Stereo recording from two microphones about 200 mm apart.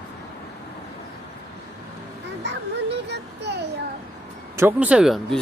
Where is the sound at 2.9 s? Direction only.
60° right (ahead or behind).